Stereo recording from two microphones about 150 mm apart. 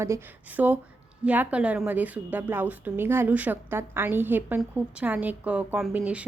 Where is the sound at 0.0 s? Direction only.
15° right (ahead or behind).